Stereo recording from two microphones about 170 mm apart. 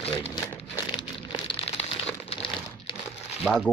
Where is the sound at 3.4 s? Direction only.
5° left (ahead or behind).